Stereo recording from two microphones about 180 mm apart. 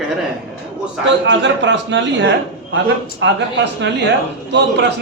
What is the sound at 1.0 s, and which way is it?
A man's voice, 90° right.